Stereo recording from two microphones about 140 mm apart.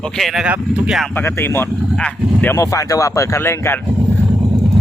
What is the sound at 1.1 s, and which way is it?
Speech, 15° left (ahead or behind).